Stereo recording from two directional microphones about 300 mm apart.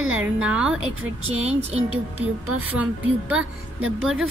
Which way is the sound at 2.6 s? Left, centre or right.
Centre.